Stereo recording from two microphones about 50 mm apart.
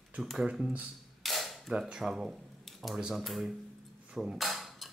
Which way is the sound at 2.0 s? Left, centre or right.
Centre.